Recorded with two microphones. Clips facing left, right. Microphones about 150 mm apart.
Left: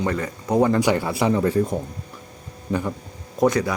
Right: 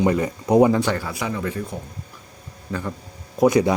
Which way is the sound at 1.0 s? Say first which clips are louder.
Left 6 dB; 30° left (ahead or behind).